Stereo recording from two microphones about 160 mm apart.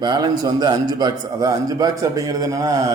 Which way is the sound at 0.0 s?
25° right (ahead or behind).